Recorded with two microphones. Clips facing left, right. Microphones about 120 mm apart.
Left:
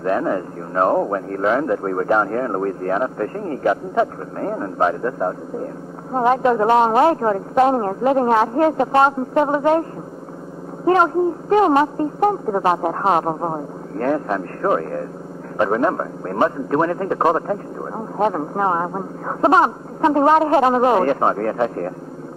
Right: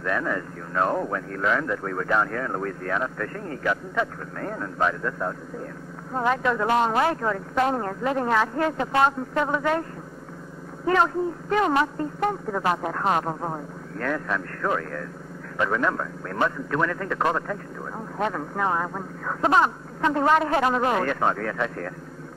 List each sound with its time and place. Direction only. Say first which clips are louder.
0.0 s a man's voice: left 7 dB; 35° left (ahead or behind)
10.9 s a man's voice: left 6 dB; 35° left (ahead or behind)